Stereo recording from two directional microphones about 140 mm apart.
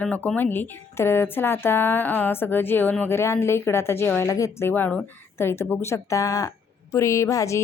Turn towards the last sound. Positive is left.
turn(degrees=20)  # may be behind; listen again after turning